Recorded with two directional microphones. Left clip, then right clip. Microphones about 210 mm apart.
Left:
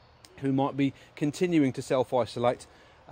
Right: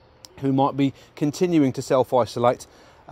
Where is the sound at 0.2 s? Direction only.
20° right (ahead or behind).